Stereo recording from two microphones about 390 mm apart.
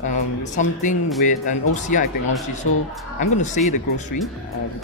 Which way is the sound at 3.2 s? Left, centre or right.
Centre.